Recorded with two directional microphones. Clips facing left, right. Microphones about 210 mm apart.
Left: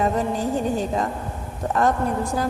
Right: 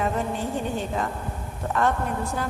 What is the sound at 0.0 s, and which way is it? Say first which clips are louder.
A woman's voice: left 4 dB; 40° left (ahead or behind).